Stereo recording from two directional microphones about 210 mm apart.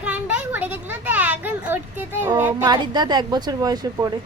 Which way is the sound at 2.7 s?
20° right (ahead or behind).